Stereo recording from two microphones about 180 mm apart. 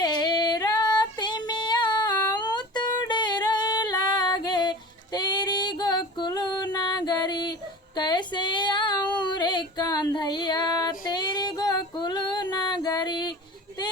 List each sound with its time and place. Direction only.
0.0 s female singing: 25° left (ahead or behind)